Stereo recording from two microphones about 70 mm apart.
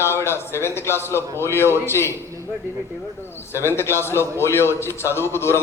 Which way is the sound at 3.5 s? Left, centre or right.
Left.